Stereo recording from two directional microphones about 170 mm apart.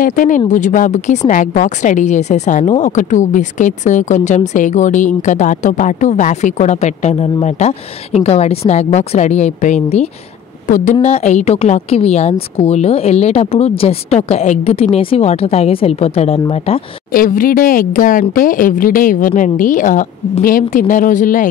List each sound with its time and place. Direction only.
0.0 s a woman's voice: 50° left (ahead or behind); by 16.8 s 35° left (ahead or behind)
17.1 s a woman's voice: 55° left (ahead or behind)